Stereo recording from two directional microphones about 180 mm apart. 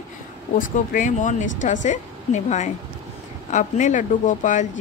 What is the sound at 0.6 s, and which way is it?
Speech, 45° left (ahead or behind).